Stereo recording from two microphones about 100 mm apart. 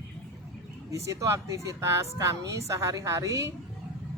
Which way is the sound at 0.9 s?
30° right (ahead or behind).